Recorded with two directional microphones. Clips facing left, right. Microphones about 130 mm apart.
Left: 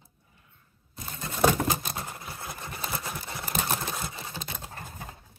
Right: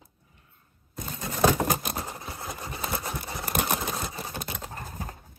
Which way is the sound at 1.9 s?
25° right (ahead or behind).